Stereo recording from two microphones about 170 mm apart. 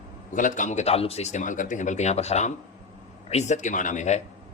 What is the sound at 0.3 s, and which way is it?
Speech, 50° left (ahead or behind).